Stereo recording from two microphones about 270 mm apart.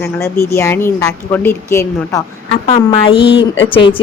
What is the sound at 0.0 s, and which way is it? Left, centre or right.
Speech, centre.